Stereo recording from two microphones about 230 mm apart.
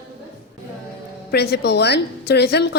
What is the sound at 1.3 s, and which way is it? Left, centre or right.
A woman's voice, left.